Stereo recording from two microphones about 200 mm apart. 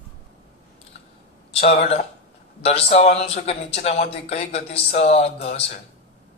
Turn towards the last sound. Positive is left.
turn(degrees=30)  # may be behind; listen again after turning